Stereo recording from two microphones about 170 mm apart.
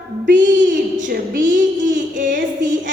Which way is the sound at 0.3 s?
50° right (ahead or behind).